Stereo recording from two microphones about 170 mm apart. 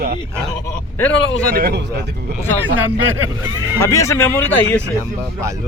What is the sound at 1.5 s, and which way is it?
Speech, 65° right (ahead or behind).